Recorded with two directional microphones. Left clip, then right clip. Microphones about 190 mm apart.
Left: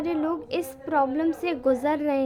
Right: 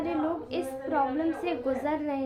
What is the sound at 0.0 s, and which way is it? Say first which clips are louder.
A woman's voice: left 3 dB; 35° left (ahead or behind).